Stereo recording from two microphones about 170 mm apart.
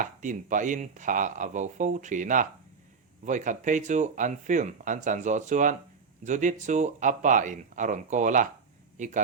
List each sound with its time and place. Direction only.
0.0 s a man's voice: 45° right (ahead or behind)